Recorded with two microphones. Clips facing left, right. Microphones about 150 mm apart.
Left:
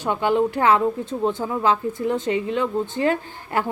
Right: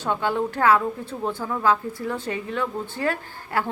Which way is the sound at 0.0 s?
15° left (ahead or behind).